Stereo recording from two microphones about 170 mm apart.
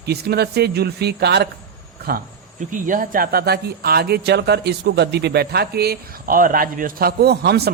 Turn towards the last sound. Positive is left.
turn(degrees=-75)  # may be behind; listen again after turning